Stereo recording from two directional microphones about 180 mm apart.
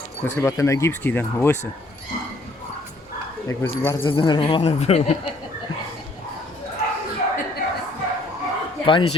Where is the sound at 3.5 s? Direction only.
15° left (ahead or behind).